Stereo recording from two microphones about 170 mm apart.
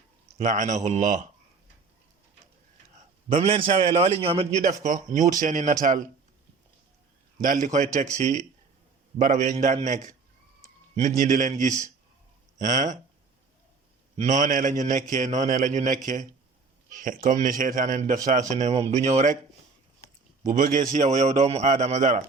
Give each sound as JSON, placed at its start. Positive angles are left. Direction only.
{"t": 0.3, "sound": "a man's voice", "side_deg": -50}
{"t": 3.2, "sound": "a man's voice", "side_deg": -35}
{"t": 7.3, "sound": "a man's voice", "side_deg": -45}
{"t": 11.2, "sound": "a man's voice", "side_deg": -50}
{"t": 14.2, "sound": "a man's voice", "side_deg": -45}
{"t": 20.4, "sound": "a man's voice", "side_deg": -50}